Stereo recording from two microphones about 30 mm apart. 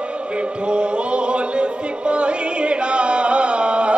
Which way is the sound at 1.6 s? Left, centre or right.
Right.